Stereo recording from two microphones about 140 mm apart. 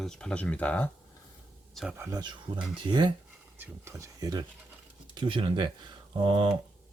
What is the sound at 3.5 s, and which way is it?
Speech, 20° right (ahead or behind).